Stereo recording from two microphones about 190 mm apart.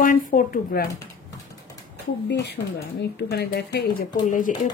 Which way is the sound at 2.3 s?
65° left (ahead or behind).